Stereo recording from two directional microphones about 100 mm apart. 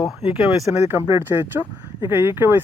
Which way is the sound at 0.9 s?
25° right (ahead or behind).